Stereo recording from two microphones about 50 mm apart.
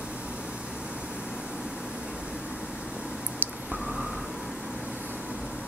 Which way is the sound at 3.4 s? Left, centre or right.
Right.